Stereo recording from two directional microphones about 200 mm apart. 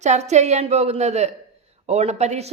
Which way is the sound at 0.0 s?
35° right (ahead or behind).